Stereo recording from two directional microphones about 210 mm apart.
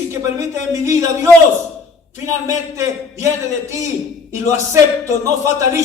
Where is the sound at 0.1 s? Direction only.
15° right (ahead or behind).